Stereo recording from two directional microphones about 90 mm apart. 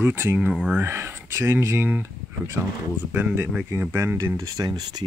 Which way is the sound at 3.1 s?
15° right (ahead or behind).